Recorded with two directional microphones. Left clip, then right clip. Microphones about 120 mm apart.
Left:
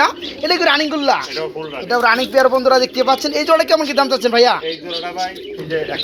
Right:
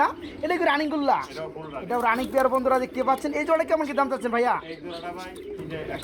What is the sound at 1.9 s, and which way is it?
Speech, 5° left (ahead or behind).